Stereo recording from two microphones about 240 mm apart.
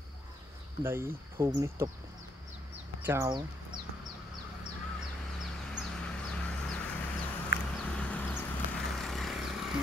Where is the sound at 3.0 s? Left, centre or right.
Centre.